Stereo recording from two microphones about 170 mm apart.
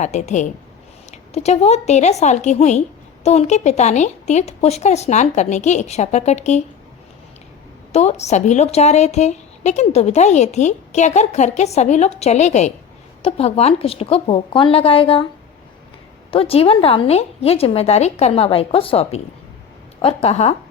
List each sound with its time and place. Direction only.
0.0 s a woman's voice: 45° left (ahead or behind)
7.9 s speech: 40° left (ahead or behind)
16.3 s speech: 35° left (ahead or behind)